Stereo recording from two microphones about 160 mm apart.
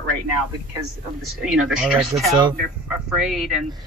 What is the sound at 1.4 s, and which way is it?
Speech, 5° right (ahead or behind).